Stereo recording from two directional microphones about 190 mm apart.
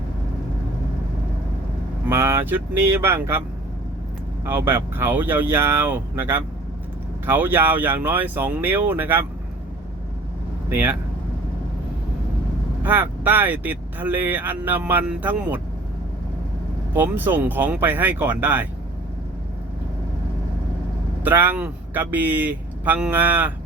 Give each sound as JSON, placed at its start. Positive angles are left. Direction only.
{"t": 2.0, "sound": "speech", "side_deg": -15}
{"t": 4.4, "sound": "speech", "side_deg": -10}
{"t": 10.7, "sound": "speech", "side_deg": -10}
{"t": 12.8, "sound": "speech", "side_deg": -10}
{"t": 16.9, "sound": "speech", "side_deg": -10}
{"t": 21.2, "sound": "speech", "side_deg": -10}